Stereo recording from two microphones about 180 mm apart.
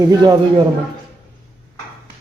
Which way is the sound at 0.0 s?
20° right (ahead or behind).